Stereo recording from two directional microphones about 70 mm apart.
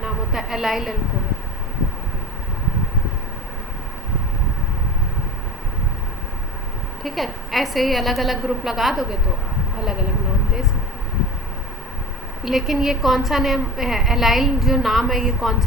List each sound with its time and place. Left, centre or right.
0.0 s a woman's voice: centre
7.0 s a woman's voice: centre
12.5 s a woman's voice: centre